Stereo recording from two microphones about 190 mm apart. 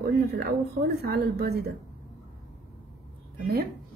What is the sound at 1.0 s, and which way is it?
Speech, 60° right (ahead or behind).